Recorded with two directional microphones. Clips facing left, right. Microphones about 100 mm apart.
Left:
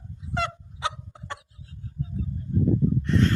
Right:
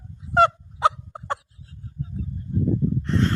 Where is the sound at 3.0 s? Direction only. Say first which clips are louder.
Even; 35° right (ahead or behind).